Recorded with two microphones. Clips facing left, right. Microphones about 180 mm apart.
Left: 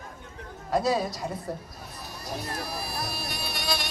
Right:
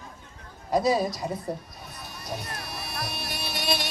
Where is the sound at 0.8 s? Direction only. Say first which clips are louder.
Right 2 dB; centre (ahead or behind).